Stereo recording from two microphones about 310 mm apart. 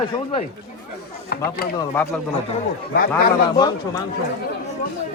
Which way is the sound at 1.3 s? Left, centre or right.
Left.